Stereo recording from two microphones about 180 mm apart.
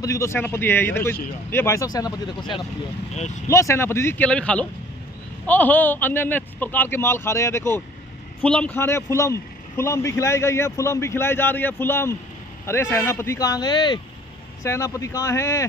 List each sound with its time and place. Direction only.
0.0 s a man's voice: 15° left (ahead or behind)